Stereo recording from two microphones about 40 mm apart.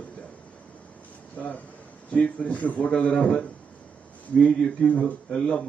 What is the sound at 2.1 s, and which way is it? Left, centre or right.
Speech, left.